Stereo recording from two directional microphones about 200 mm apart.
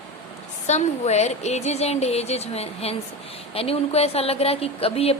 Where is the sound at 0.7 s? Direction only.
35° left (ahead or behind).